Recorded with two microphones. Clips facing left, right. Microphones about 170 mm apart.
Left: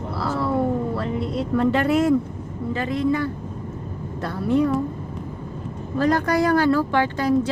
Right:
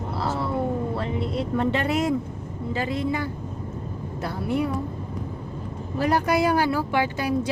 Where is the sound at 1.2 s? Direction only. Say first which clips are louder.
Left 2 dB; centre (ahead or behind).